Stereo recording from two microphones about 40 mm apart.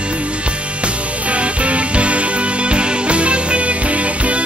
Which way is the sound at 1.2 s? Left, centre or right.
Right.